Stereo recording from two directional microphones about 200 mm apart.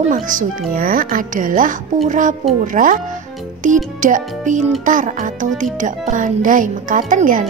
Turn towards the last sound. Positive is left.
turn(degrees=-40)  # may be behind; listen again after turning